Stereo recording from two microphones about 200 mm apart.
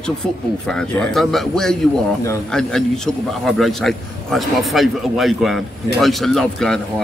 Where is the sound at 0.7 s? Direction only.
5° left (ahead or behind).